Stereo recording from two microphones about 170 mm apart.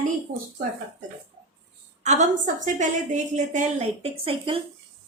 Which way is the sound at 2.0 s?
45° right (ahead or behind).